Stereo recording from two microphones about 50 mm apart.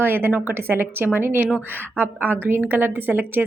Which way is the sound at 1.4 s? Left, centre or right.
Right.